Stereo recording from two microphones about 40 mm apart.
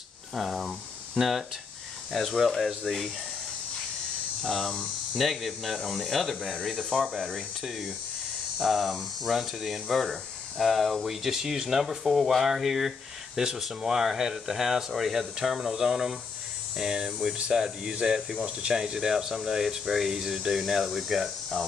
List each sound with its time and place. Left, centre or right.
0.3 s speech: centre
2.1 s speech: centre
4.4 s hum: centre
5.1 s speech: centre
6.0 s hum: centre
8.6 s speech: centre
15.3 s speech: centre
17.6 s speech: centre